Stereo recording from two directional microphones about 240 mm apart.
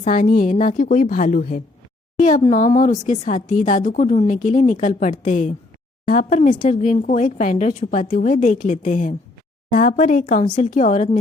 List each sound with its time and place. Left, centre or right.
0.0 s speech: left